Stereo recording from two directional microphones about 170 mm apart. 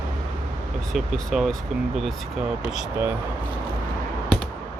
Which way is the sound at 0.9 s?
Centre (ahead or behind).